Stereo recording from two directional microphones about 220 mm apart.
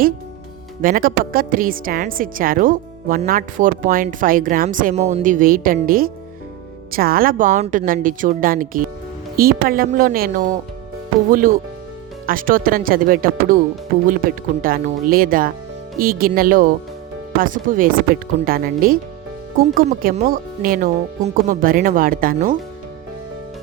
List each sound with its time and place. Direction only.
0.8 s a woman's voice: 40° right (ahead or behind)